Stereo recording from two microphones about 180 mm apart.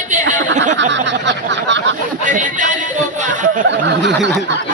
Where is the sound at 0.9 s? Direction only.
85° right.